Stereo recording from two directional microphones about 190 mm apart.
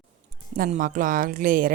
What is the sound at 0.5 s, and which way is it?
A woman's voice, 45° right (ahead or behind).